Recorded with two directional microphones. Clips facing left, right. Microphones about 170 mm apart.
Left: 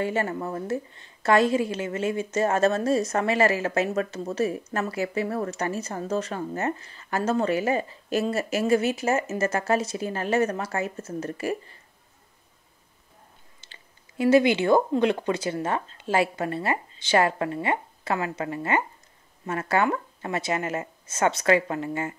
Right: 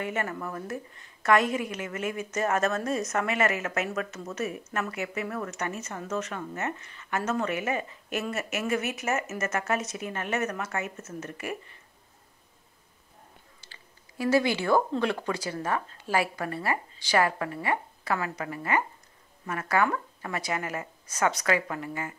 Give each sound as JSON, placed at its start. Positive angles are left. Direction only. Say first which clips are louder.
{"t": 0.0, "sound": "a woman's voice", "louder": "left 5 dB", "side_deg": 30}
{"t": 13.6, "sound": "a woman's voice", "louder": "even", "side_deg": 20}